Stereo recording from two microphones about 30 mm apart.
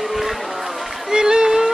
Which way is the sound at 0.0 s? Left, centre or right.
Centre.